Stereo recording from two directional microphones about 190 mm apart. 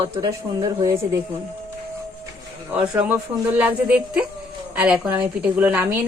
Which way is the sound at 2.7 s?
10° right (ahead or behind).